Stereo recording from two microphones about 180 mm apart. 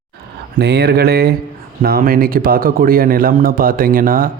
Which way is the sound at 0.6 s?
65° right (ahead or behind).